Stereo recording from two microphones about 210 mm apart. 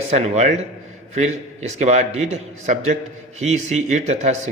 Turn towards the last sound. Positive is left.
turn(degrees=-30)  # may be behind; listen again after turning